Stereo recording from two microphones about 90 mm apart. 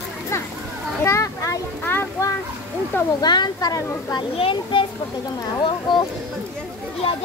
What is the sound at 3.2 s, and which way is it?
Speech, 50° left (ahead or behind).